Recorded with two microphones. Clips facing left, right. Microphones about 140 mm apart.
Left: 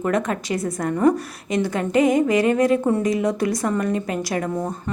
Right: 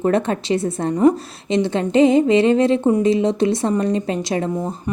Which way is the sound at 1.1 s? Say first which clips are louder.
Right 3 dB; 25° right (ahead or behind).